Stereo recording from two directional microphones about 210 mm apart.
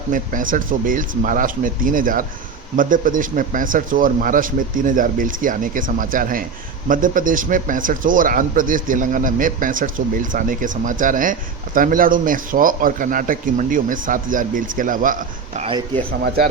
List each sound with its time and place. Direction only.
0.1 s a man's voice: 40° right (ahead or behind)
15.6 s speech: 25° right (ahead or behind)
16.2 s speech: 45° right (ahead or behind)